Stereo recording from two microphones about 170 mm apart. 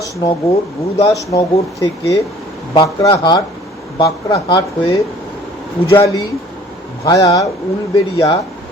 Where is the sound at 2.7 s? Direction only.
30° left (ahead or behind).